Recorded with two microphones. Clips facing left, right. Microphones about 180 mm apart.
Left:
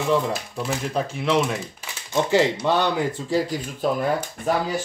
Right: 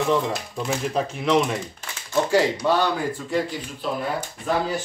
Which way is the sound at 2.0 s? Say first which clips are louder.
Even; 20° left (ahead or behind).